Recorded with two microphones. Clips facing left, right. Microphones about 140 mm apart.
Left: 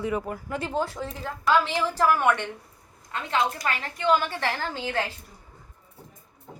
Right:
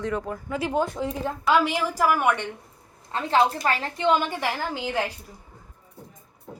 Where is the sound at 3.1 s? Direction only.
35° right (ahead or behind); by 5.1 s 15° right (ahead or behind).